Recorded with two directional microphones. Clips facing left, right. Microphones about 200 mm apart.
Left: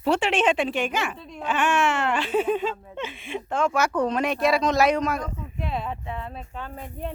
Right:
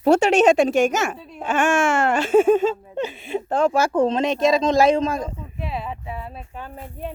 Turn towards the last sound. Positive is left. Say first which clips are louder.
# even
turn(degrees=-10)  # may be behind; listen again after turning